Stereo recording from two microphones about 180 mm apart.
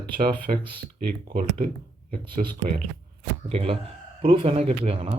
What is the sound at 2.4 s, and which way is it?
Speech, 40° right (ahead or behind).